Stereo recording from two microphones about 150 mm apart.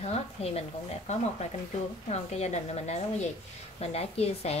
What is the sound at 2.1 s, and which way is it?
A woman's voice, 45° left (ahead or behind).